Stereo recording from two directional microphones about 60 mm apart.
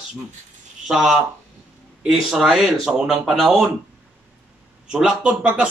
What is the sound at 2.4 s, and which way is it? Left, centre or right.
Speech, centre.